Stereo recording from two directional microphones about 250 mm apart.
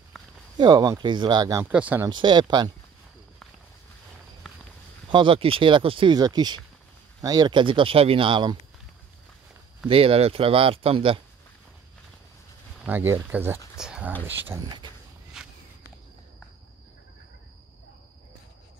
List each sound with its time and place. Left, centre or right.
0.1 s a sound: centre
0.6 s speech: centre
2.0 s speech: centre
5.1 s speech: right
9.8 s speech: right
12.8 s speech: centre
15.3 s walk: centre